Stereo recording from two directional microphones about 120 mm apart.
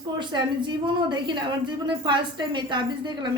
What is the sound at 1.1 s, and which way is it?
A woman's voice, 40° right (ahead or behind).